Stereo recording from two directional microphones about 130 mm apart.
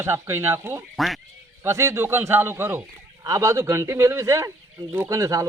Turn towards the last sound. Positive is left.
turn(degrees=-25)  # may be behind; listen again after turning